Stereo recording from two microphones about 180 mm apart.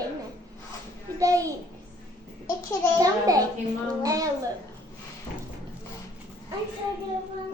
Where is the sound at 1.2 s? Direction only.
20° right (ahead or behind).